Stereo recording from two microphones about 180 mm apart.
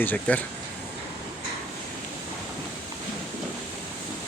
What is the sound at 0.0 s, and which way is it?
Speech, 10° left (ahead or behind).